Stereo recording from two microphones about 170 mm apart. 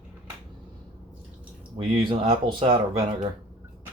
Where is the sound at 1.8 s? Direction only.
30° right (ahead or behind).